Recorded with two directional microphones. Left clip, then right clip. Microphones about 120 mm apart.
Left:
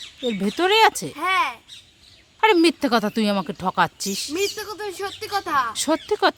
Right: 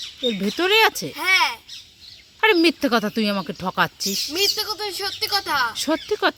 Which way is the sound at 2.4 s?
10° left (ahead or behind).